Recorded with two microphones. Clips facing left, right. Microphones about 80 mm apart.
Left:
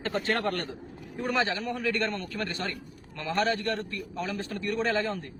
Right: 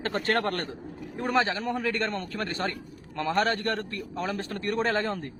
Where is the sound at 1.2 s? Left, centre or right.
Right.